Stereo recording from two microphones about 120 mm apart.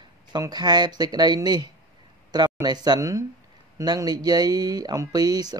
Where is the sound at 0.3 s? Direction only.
35° right (ahead or behind).